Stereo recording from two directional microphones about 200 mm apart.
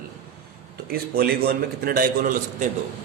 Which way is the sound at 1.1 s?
50° right (ahead or behind).